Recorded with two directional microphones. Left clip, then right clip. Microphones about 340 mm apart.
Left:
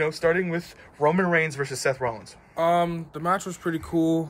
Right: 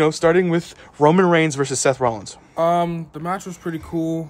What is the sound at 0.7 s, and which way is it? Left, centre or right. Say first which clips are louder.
Speech: right 7 dB; right.